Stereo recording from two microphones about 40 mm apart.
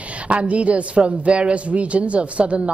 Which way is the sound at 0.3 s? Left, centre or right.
Right.